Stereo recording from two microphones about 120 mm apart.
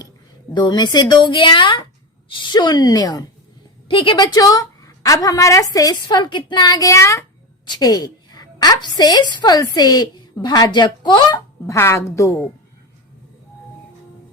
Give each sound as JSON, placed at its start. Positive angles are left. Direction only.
{"t": 0.5, "sound": "speech", "side_deg": 35}
{"t": 3.8, "sound": "a woman's voice", "side_deg": 45}
{"t": 4.3, "sound": "a woman's voice", "side_deg": 30}
{"t": 7.7, "sound": "a woman's voice", "side_deg": 35}
{"t": 11.6, "sound": "a woman's voice", "side_deg": 25}